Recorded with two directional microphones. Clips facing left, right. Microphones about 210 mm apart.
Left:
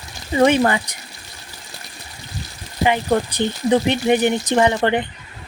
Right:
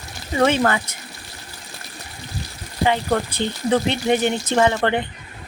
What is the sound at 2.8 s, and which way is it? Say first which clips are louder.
Speech: left 2 dB; 15° left (ahead or behind).